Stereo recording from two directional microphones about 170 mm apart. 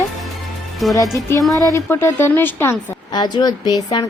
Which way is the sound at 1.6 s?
15° left (ahead or behind).